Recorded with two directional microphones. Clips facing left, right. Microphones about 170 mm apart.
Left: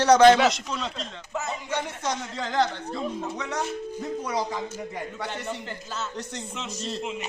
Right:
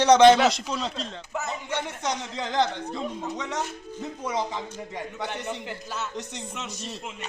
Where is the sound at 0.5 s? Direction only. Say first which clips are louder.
Right 2 dB; 35° right (ahead or behind).